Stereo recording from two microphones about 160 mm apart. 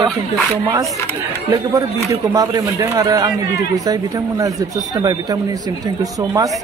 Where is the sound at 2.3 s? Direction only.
25° right (ahead or behind).